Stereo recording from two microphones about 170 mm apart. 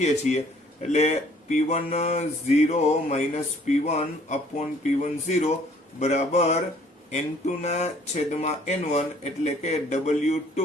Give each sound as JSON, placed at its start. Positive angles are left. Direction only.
{"t": 0.0, "sound": "speech", "side_deg": 40}